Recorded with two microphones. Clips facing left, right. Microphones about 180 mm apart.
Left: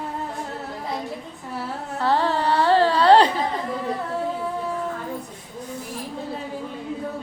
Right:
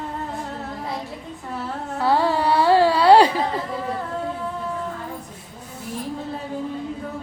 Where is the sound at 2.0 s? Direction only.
10° right (ahead or behind).